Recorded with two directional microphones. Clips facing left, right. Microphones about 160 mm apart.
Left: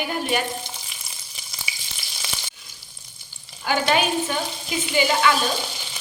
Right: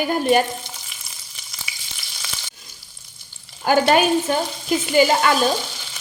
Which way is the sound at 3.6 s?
45° right (ahead or behind).